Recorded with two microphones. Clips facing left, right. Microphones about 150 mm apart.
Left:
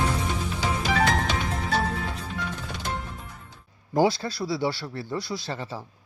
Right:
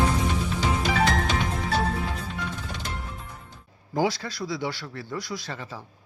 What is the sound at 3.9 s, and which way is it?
Speech, 30° left (ahead or behind).